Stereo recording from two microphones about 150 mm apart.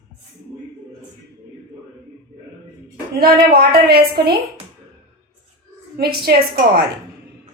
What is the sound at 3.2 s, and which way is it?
A woman's voice, 85° right.